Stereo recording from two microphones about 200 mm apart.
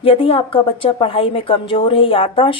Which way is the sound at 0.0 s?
25° left (ahead or behind).